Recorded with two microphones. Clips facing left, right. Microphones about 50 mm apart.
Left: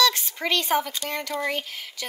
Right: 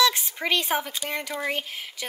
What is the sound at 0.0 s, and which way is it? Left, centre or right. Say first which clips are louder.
Speech: even; centre.